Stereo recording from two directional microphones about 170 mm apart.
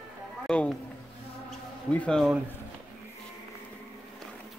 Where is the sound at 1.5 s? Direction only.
5° left (ahead or behind).